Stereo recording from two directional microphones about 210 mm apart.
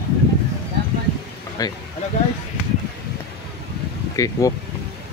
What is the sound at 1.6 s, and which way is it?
Speech, 15° left (ahead or behind).